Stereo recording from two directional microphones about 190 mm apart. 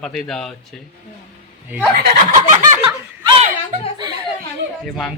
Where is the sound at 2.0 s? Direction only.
45° right (ahead or behind).